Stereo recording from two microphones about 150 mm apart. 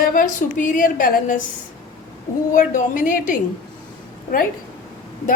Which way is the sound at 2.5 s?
60° left (ahead or behind).